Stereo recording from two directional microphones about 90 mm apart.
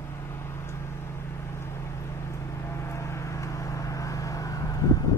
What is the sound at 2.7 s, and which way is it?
Vehicle, 30° left (ahead or behind).